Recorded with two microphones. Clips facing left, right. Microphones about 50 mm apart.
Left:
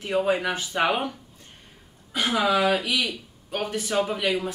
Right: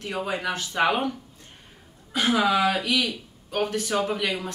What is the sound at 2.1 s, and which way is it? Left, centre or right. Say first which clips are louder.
Speech: right 1 dB; centre.